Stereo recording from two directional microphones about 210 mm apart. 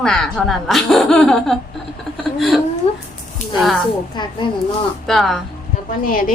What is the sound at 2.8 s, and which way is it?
Speech, 30° left (ahead or behind).